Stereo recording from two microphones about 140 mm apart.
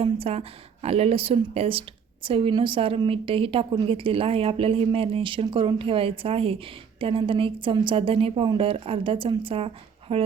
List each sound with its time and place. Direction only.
0.0 s a woman's voice: 45° right (ahead or behind)